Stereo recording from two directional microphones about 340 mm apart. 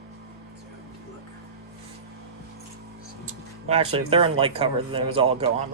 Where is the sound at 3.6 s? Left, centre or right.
Centre.